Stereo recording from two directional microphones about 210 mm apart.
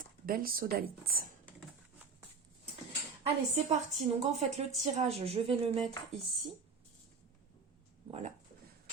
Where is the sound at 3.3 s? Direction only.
30° right (ahead or behind).